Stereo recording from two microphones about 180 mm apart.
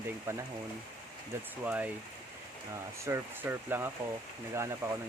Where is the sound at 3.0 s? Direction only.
15° right (ahead or behind).